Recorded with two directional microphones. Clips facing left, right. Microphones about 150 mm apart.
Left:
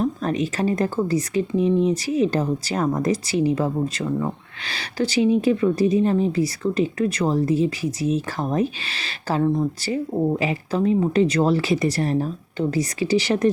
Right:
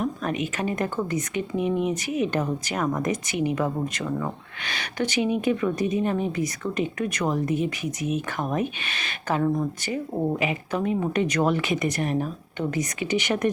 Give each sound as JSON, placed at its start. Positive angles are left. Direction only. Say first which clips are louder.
{"t": 0.0, "sound": "speech", "louder": "left 4 dB", "side_deg": 35}